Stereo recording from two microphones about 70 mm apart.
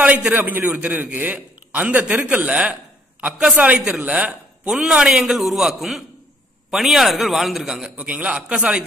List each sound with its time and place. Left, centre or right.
0.0 s a man's voice: right
5.2 s a man's voice: centre
8.0 s a man's voice: centre